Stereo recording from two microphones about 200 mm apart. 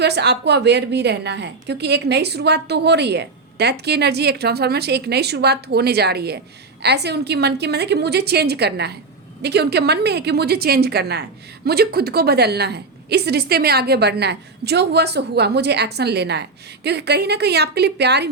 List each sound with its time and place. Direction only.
0.0 s a woman's voice: 55° right (ahead or behind)